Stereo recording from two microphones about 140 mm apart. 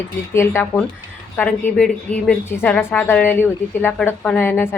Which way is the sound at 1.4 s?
10° left (ahead or behind).